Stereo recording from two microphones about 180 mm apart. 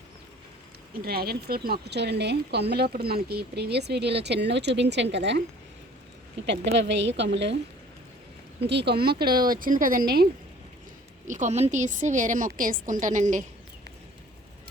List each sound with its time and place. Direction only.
1.0 s speech: 60° right (ahead or behind); by 5.4 s 75° right (ahead or behind)
6.4 s speech: 75° right (ahead or behind)
8.6 s a woman's voice: 65° right (ahead or behind)
11.3 s a woman's voice: 40° right (ahead or behind)